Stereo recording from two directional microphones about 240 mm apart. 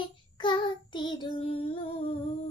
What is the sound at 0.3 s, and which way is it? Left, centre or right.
Child singing, centre.